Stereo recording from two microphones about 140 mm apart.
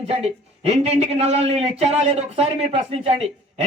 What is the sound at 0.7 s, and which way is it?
Speech, 50° right (ahead or behind).